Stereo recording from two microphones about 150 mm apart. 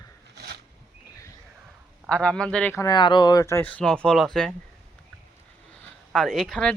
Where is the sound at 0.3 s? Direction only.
90° right.